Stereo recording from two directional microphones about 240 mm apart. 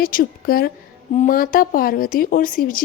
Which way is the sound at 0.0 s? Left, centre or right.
Left.